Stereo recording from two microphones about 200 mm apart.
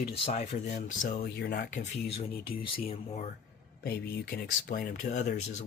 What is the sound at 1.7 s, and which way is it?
Speech, 35° left (ahead or behind).